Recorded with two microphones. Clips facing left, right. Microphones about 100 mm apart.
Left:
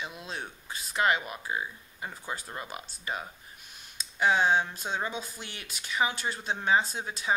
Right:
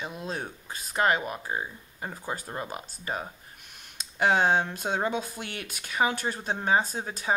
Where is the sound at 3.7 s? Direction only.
55° right (ahead or behind).